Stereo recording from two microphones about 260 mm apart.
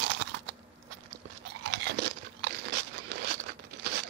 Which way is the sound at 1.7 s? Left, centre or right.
Right.